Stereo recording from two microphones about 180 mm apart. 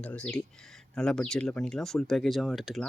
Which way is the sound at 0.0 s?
5° left (ahead or behind).